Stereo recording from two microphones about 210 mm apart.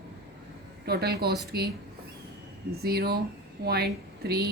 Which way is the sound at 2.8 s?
50° right (ahead or behind).